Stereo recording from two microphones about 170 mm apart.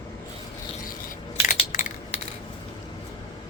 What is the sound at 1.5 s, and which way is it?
Crushing, 45° left (ahead or behind).